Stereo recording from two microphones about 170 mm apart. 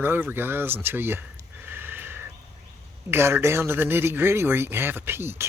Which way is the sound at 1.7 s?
10° right (ahead or behind).